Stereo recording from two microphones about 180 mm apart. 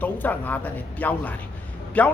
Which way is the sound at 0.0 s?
10° left (ahead or behind).